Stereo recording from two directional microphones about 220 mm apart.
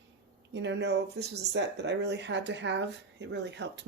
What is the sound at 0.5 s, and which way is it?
Speech, 55° right (ahead or behind).